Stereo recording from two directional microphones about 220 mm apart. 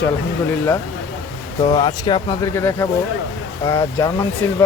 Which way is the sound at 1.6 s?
20° left (ahead or behind).